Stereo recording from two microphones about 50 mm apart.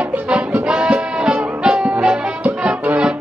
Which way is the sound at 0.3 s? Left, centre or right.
Right.